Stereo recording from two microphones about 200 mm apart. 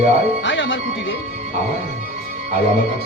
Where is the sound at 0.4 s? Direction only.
65° left (ahead or behind).